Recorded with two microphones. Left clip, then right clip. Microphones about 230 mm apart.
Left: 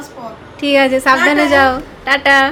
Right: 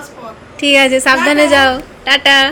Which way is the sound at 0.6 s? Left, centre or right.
Centre.